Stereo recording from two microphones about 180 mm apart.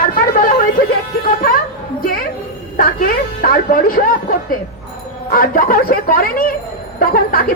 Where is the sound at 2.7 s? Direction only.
50° left (ahead or behind).